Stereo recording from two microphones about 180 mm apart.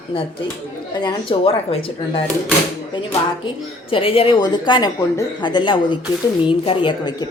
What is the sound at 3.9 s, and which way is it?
Speech, 30° left (ahead or behind).